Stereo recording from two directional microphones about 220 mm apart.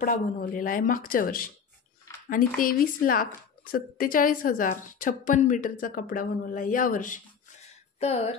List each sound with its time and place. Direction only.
0.0 s a woman's voice: 35° left (ahead or behind)